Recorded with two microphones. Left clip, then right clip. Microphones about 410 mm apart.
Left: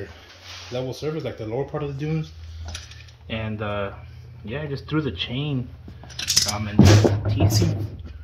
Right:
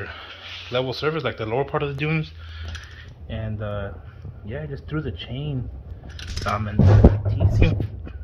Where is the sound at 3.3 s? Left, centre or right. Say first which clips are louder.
Left 3 dB; centre.